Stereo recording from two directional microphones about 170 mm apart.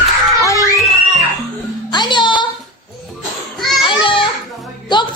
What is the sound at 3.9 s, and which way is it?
Children playing, 30° left (ahead or behind).